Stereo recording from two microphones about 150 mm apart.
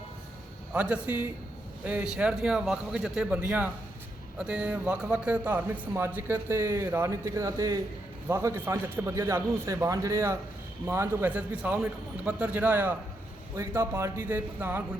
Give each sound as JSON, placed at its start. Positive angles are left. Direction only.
{"t": 0.7, "sound": "a man's voice", "side_deg": -10}